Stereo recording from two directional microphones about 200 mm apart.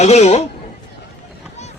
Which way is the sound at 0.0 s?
35° left (ahead or behind).